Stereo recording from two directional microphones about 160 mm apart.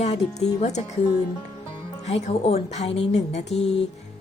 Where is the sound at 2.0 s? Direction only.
45° left (ahead or behind).